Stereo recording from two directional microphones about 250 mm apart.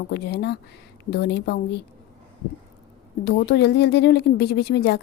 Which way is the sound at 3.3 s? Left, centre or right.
Left.